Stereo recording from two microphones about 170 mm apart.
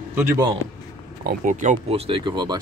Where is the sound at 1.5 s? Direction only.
50° right (ahead or behind); by 2.6 s 25° right (ahead or behind).